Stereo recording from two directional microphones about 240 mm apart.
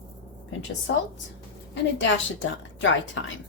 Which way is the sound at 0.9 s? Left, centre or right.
Left.